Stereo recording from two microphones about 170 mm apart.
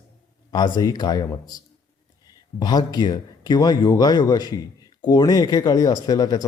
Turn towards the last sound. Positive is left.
turn(degrees=20)  # may be behind; listen again after turning